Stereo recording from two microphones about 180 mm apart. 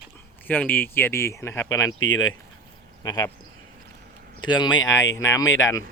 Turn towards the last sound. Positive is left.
turn(degrees=15)  # may be behind; listen again after turning